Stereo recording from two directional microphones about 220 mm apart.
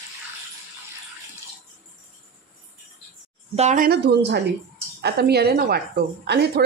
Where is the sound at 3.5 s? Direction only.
35° right (ahead or behind).